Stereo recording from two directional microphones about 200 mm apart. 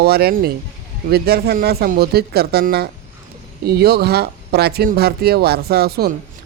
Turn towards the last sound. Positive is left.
turn(degrees=-50)  # may be behind; listen again after turning